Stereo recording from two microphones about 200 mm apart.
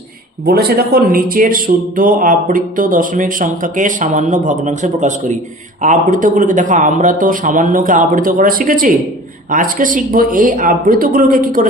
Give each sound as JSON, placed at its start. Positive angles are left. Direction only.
{"t": 0.4, "sound": "a man's voice", "side_deg": -50}